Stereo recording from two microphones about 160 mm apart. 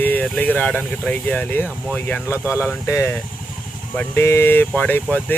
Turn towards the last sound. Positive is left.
turn(degrees=10)  # may be behind; listen again after turning